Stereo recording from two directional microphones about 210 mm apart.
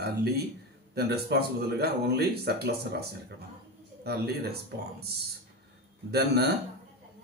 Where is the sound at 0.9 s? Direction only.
50° right (ahead or behind).